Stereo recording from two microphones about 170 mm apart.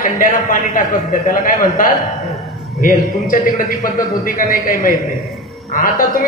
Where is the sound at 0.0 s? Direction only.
50° left (ahead or behind).